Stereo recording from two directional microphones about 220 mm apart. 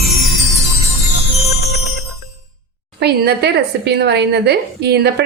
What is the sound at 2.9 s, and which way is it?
A woman's voice, 50° right (ahead or behind).